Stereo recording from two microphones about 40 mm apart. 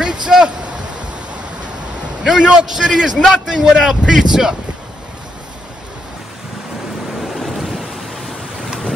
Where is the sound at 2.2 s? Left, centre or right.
Centre.